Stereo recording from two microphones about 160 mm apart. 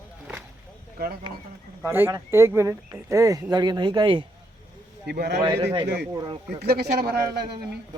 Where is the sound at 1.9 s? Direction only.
15° right (ahead or behind); by 4.2 s 30° right (ahead or behind).